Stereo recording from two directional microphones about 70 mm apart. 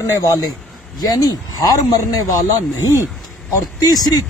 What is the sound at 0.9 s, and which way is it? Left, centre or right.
Speech, left.